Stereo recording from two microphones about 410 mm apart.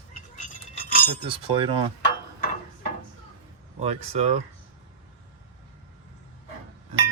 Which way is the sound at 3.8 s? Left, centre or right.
Centre.